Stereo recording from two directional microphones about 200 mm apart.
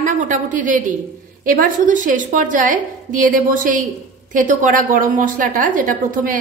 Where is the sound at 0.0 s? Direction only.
40° right (ahead or behind).